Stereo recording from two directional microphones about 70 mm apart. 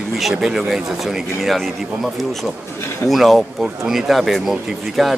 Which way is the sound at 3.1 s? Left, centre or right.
Centre.